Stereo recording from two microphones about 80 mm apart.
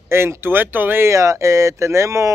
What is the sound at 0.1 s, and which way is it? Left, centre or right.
Speech, right.